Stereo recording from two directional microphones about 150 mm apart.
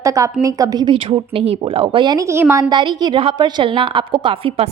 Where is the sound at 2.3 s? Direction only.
15° right (ahead or behind).